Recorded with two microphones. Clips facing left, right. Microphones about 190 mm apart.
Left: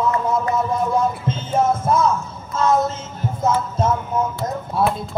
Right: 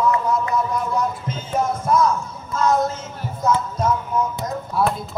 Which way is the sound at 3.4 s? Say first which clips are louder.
Left 1 dB; 25° left (ahead or behind).